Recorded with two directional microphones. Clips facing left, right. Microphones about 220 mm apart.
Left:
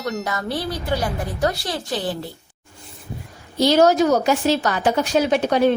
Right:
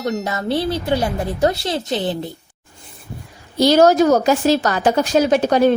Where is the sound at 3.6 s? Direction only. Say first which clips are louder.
Right 3 dB; 45° right (ahead or behind).